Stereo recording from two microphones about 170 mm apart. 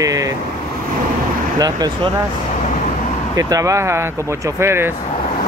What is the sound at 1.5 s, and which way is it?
Speech, 25° right (ahead or behind).